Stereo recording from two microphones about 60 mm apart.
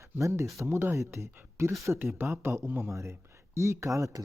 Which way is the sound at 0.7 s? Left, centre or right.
Right.